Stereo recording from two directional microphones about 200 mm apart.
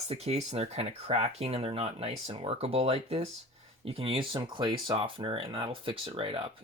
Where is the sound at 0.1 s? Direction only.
30° right (ahead or behind).